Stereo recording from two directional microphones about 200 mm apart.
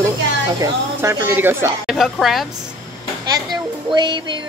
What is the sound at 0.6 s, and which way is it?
A woman's voice, 10° right (ahead or behind).